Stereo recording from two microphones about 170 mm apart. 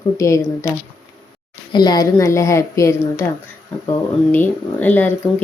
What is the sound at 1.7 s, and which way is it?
Speech, 25° left (ahead or behind).